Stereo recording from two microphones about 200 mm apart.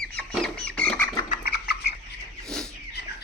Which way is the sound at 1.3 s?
50° left (ahead or behind).